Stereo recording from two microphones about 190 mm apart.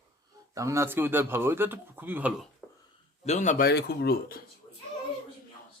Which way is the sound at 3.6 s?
55° left (ahead or behind).